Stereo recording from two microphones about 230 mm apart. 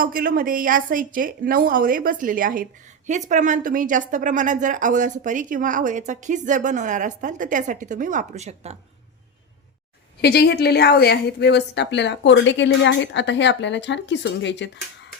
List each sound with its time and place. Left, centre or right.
0.0 s a woman's voice: right
10.2 s a woman's voice: left